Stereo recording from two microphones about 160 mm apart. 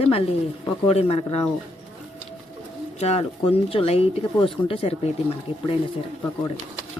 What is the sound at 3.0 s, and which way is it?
Speech, 40° left (ahead or behind).